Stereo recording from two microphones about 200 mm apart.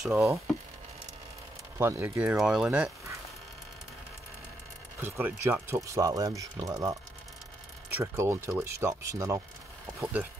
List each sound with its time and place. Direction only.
0.0 s speech: 5° right (ahead or behind)
1.8 s speech: 10° right (ahead or behind)
5.0 s speech: 10° right (ahead or behind)
8.0 s speech: 15° right (ahead or behind)